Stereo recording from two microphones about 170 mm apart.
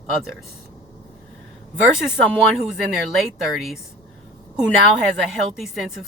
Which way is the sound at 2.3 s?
Centre (ahead or behind).